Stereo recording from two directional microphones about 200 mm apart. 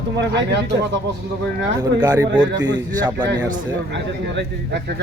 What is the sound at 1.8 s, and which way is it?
Speech, 15° right (ahead or behind).